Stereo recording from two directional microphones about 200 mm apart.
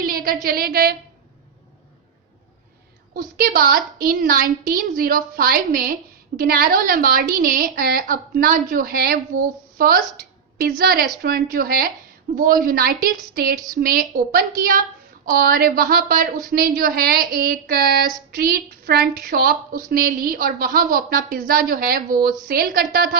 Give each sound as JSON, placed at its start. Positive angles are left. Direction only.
{"t": 0.0, "sound": "a sound", "side_deg": -45}
{"t": 0.4, "sound": "a woman's voice", "side_deg": -50}
{"t": 3.2, "sound": "a woman's voice", "side_deg": -45}